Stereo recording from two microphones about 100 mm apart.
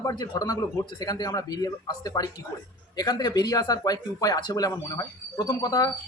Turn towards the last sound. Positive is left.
turn(degrees=40)  # may be behind; listen again after turning